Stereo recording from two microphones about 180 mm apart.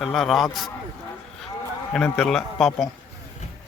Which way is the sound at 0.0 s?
Centre (ahead or behind).